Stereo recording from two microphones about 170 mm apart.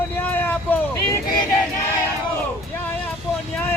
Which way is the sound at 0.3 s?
10° left (ahead or behind).